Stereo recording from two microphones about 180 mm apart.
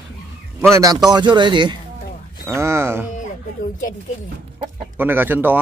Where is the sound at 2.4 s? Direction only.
15° right (ahead or behind).